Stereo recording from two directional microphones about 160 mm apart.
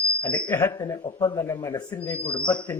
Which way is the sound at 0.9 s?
25° left (ahead or behind).